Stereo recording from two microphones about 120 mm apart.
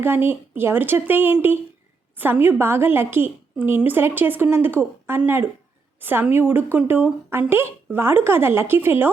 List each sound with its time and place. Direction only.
0.0 s a woman's voice: 20° right (ahead or behind)